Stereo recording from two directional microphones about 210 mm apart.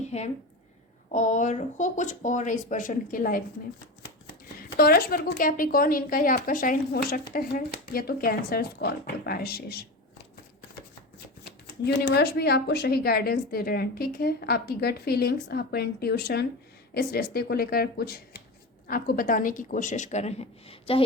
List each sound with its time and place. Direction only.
0.1 s speech: 30° left (ahead or behind)
4.8 s a woman's voice: 45° left (ahead or behind)
11.8 s a woman's voice: 50° left (ahead or behind); by 21.0 s 25° left (ahead or behind)